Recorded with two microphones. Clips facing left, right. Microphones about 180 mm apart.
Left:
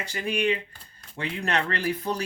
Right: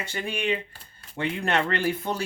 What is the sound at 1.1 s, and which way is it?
Speech, 25° right (ahead or behind).